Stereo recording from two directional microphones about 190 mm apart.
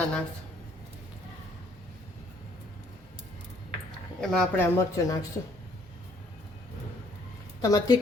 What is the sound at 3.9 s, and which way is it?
Speech, 5° left (ahead or behind).